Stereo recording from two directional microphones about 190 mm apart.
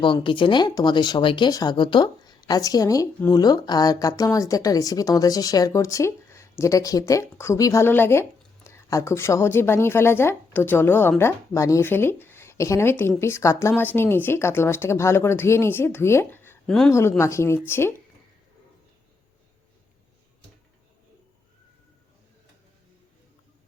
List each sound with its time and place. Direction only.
0.0 s speech: 25° left (ahead or behind)